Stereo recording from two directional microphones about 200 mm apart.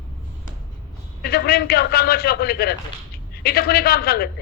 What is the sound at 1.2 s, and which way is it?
A woman's voice, 50° left (ahead or behind).